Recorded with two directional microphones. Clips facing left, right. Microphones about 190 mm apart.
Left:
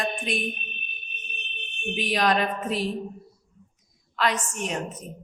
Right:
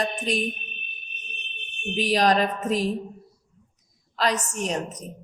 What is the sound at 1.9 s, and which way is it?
Speech, 40° right (ahead or behind).